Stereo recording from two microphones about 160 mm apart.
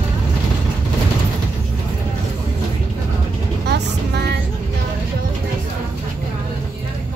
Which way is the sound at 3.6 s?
90° right.